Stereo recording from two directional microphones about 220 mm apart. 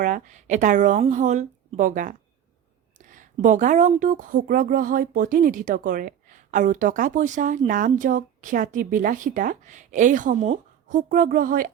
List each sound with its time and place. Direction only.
0.0 s speech: 35° right (ahead or behind)